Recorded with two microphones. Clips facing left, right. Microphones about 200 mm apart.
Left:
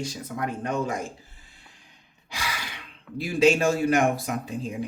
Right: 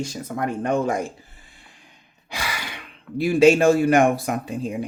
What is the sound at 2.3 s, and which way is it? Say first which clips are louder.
Sigh: right 3 dB; 60° right (ahead or behind).